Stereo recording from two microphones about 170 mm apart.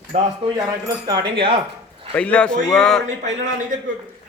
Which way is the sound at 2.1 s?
10° left (ahead or behind).